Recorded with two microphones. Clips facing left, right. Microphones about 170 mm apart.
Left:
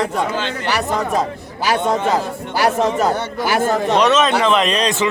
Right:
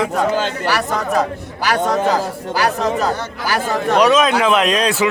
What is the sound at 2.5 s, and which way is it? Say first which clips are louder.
Speech: left 2 dB; 25° left (ahead or behind).